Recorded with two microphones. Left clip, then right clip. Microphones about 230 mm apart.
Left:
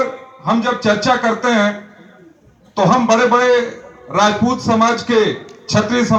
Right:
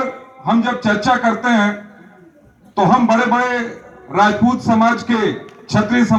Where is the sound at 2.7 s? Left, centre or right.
Left.